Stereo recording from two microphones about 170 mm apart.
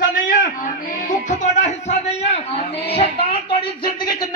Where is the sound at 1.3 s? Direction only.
45° left (ahead or behind).